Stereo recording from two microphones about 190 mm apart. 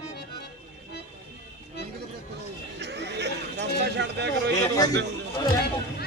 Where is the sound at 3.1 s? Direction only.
65° right (ahead or behind).